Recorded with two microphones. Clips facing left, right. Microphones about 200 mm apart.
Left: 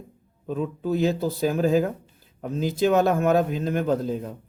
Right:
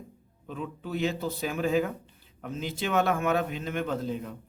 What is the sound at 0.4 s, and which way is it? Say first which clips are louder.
Speech: left 10 dB; 40° left (ahead or behind).